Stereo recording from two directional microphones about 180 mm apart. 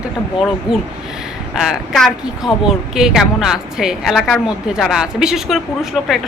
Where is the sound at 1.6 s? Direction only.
Centre (ahead or behind).